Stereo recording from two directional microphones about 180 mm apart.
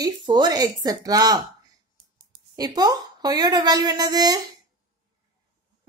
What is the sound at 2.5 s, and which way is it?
A woman's voice, 20° right (ahead or behind).